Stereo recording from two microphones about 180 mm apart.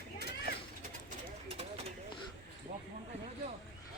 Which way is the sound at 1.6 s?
35° right (ahead or behind).